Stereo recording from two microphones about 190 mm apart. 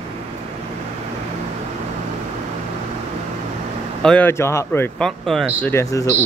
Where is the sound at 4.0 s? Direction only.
5° left (ahead or behind).